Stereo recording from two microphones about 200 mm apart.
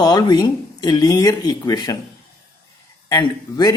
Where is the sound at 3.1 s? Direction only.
20° left (ahead or behind).